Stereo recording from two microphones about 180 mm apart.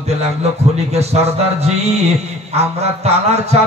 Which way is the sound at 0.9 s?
35° right (ahead or behind).